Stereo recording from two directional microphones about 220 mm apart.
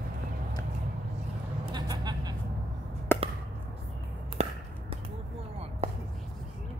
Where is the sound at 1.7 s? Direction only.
20° right (ahead or behind).